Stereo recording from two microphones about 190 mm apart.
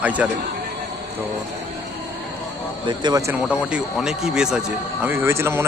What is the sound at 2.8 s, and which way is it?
Speech, 20° right (ahead or behind).